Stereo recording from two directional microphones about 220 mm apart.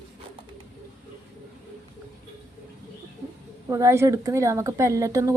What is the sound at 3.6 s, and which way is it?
A woman's voice, 15° right (ahead or behind).